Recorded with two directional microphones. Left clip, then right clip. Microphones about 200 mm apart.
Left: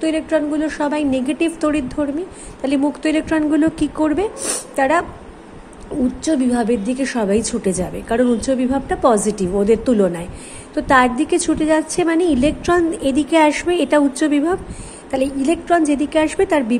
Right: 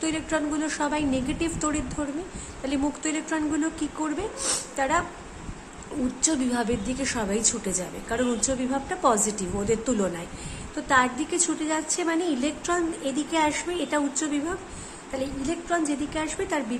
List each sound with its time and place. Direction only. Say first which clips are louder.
0.0 s a woman's voice: left 9 dB; 15° left (ahead or behind)
6.2 s a woman's voice: left 8 dB; 15° left (ahead or behind)